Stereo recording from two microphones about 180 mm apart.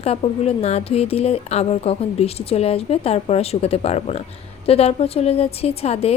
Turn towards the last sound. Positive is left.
turn(degrees=35)  # may be behind; listen again after turning